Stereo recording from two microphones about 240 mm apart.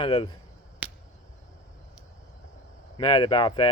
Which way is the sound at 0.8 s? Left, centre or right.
Centre.